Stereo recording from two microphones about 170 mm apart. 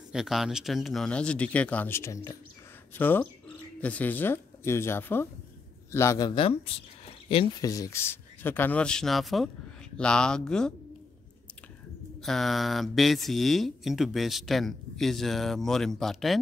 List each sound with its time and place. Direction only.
0.1 s speech: centre (ahead or behind); by 7.4 s 30° left (ahead or behind)
7.6 s speech: 20° left (ahead or behind); by 10.7 s 5° left (ahead or behind)
12.2 s speech: centre (ahead or behind)